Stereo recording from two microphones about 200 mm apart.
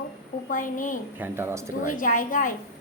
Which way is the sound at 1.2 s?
10° right (ahead or behind).